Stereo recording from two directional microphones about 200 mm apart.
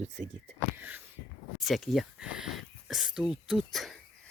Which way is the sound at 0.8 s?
10° right (ahead or behind).